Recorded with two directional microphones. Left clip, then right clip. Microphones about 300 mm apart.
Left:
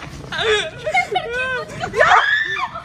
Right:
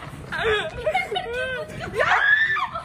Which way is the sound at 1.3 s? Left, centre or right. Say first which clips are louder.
Left 5 dB; centre.